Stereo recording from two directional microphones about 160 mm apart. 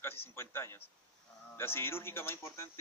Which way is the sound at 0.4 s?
15° left (ahead or behind).